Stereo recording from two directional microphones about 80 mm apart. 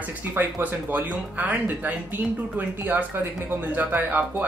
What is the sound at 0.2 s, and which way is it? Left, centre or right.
Speech, right.